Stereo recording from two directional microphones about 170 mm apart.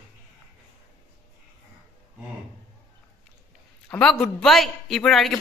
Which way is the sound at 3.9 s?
5° left (ahead or behind).